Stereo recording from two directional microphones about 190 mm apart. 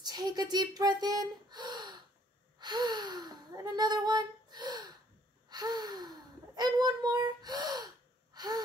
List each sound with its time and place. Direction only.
0.0 s speech: 20° right (ahead or behind)
2.6 s a sound: 20° right (ahead or behind)
5.5 s gasp: 20° right (ahead or behind)